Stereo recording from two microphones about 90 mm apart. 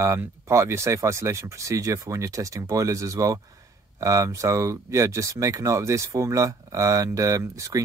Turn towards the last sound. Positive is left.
turn(degrees=-35)  # may be behind; listen again after turning